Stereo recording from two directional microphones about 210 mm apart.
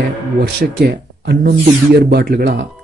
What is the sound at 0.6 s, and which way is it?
Speech, 50° right (ahead or behind).